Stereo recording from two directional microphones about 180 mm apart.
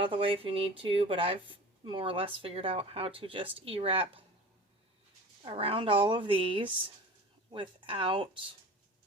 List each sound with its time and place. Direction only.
0.0 s speech: 30° right (ahead or behind)
5.5 s speech: 30° right (ahead or behind)